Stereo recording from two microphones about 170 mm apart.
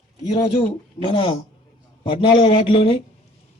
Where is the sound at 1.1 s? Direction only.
30° left (ahead or behind).